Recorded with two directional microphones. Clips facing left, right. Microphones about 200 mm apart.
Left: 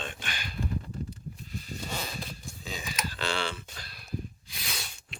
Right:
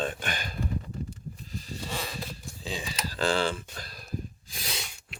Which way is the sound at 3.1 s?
45° right (ahead or behind).